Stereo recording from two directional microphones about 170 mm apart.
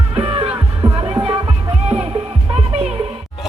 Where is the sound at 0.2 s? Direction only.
35° right (ahead or behind).